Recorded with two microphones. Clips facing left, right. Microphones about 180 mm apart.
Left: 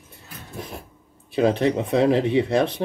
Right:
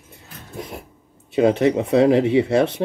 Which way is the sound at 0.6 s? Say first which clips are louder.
Right 3 dB; 25° right (ahead or behind).